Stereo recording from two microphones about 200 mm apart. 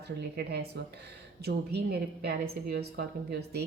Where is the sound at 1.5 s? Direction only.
55° right (ahead or behind).